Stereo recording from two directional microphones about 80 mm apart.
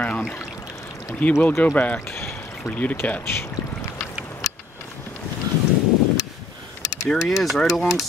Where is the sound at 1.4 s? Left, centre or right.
Left.